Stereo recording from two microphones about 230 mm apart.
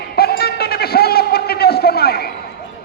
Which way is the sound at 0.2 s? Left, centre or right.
Left.